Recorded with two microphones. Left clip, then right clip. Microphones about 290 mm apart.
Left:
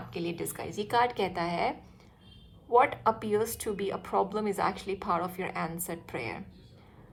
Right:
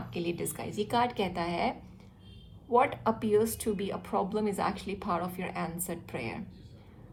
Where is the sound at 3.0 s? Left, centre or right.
Left.